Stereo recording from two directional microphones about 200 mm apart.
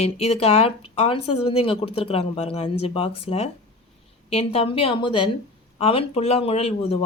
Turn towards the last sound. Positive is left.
turn(degrees=30)  # may be behind; listen again after turning